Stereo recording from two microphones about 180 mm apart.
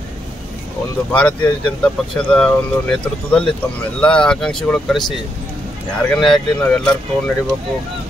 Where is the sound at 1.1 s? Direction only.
5° left (ahead or behind).